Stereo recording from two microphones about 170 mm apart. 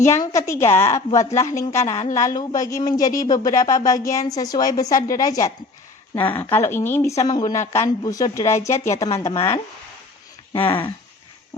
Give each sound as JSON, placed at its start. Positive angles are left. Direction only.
{"t": 0.1, "sound": "speech", "side_deg": 15}
{"t": 10.7, "sound": "speech", "side_deg": 30}